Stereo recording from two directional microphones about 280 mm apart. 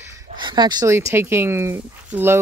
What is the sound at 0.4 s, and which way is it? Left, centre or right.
Speech, centre.